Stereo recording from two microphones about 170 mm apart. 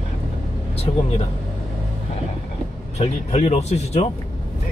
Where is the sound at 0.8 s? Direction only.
35° left (ahead or behind).